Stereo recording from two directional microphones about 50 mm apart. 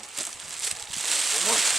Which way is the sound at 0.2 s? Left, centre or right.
Centre.